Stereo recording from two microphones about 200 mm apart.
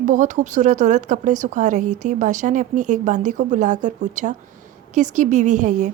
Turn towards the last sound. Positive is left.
turn(degrees=-40)  # may be behind; listen again after turning